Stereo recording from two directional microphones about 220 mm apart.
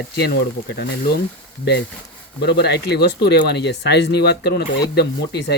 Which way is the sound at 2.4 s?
50° left (ahead or behind).